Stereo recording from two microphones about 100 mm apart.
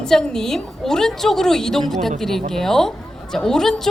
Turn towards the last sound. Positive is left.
turn(degrees=5)  # may be behind; listen again after turning